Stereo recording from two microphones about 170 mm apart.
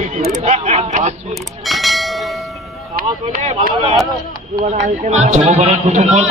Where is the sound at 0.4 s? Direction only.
40° right (ahead or behind).